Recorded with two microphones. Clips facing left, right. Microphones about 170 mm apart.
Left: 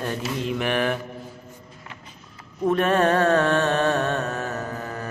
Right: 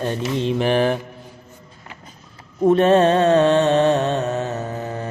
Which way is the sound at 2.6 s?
25° right (ahead or behind).